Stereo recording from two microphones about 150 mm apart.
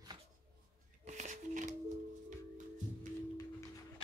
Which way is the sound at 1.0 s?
55° right (ahead or behind).